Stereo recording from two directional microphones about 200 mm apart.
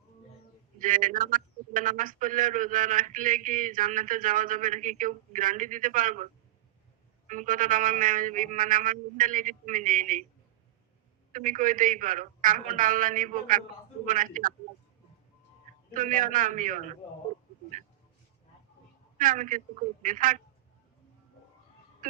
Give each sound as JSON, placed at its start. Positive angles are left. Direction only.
{"t": 0.8, "sound": "a man's voice", "side_deg": -40}
{"t": 7.3, "sound": "a man's voice", "side_deg": -40}
{"t": 11.3, "sound": "a man's voice", "side_deg": -40}
{"t": 16.0, "sound": "a man's voice", "side_deg": -40}
{"t": 19.1, "sound": "a man's voice", "side_deg": -40}